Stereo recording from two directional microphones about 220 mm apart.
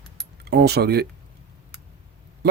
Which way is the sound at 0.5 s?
50° right (ahead or behind).